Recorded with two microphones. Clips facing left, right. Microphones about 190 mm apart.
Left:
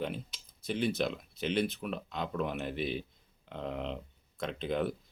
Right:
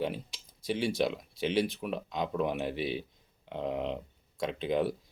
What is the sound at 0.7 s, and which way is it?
Speech, 10° right (ahead or behind).